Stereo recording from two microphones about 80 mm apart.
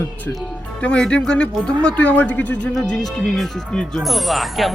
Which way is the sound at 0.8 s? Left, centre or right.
Centre.